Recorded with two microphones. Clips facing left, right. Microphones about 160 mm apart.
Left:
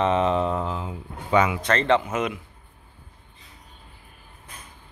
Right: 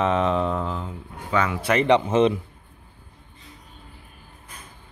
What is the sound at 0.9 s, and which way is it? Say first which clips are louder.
Speech: left 3 dB; 15° left (ahead or behind).